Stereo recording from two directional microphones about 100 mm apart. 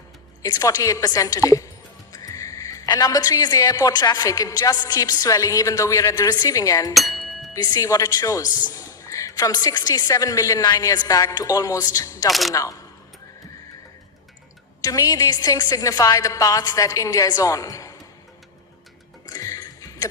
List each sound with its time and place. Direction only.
0.4 s speech: 40° left (ahead or behind)
12.3 s speech: centre (ahead or behind)
12.5 s speech: 35° left (ahead or behind)
14.8 s speech: 35° left (ahead or behind)
19.3 s a sound: 35° left (ahead or behind)